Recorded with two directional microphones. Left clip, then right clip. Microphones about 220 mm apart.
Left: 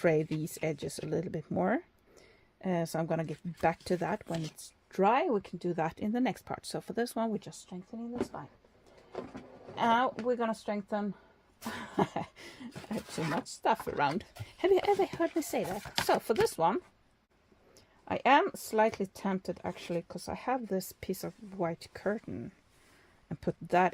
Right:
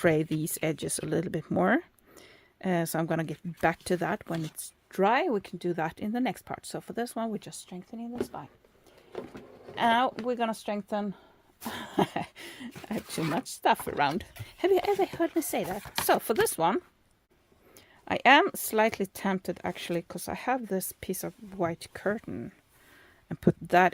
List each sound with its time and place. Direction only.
0.0 s speech: 25° right (ahead or behind)
9.1 s a sound: 40° right (ahead or behind)
9.7 s speech: 20° right (ahead or behind)
18.0 s speech: 30° right (ahead or behind)